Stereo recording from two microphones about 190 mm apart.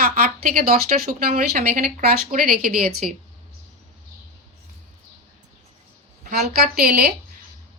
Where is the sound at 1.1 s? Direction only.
45° right (ahead or behind).